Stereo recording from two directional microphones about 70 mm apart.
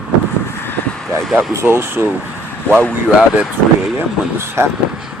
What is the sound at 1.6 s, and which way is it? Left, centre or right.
Speech, right.